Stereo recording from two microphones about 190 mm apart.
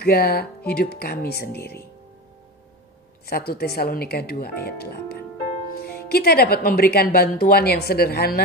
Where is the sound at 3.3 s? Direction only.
55° left (ahead or behind).